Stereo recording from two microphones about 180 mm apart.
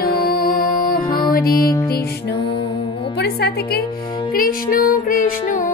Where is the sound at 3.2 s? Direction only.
65° left (ahead or behind).